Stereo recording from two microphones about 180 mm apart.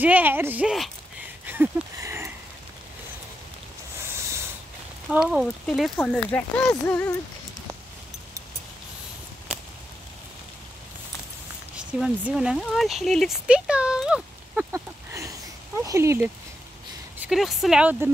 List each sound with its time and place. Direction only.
0.0 s speech: 10° right (ahead or behind)
1.4 s a sound: 10° right (ahead or behind)
5.1 s speech: 5° right (ahead or behind)
11.7 s speech: 5° right (ahead or behind)
17.2 s speech: centre (ahead or behind)